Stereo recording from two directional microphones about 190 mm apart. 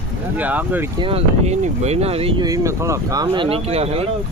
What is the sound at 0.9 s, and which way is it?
Speech, 30° right (ahead or behind).